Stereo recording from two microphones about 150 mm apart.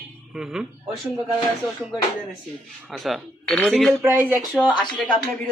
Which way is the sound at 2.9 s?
Centre (ahead or behind).